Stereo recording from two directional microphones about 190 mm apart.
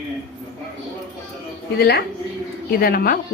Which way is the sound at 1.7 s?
55° left (ahead or behind).